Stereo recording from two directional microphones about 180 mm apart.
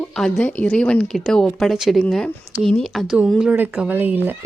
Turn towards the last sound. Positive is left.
turn(degrees=-10)  # may be behind; listen again after turning